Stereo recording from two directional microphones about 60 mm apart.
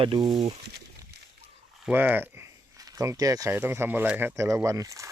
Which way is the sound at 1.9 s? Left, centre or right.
Right.